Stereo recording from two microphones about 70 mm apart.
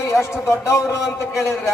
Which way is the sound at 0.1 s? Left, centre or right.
Left.